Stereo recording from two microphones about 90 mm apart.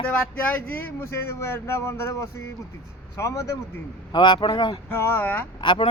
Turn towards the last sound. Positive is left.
turn(degrees=60)  # may be behind; listen again after turning